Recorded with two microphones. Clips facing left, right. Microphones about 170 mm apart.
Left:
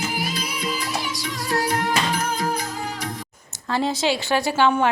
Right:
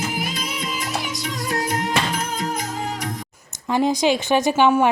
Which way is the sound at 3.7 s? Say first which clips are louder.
Right 4 dB; 15° right (ahead or behind).